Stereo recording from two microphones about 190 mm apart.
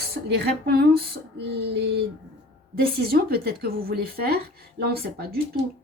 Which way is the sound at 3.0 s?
55° right (ahead or behind).